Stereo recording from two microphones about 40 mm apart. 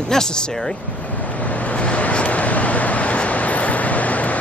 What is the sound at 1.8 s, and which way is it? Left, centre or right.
Vehicle, left.